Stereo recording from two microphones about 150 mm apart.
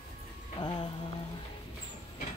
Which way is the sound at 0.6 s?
30° left (ahead or behind).